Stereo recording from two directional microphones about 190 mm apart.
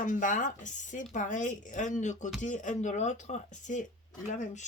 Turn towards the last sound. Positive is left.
turn(degrees=40)  # may be behind; listen again after turning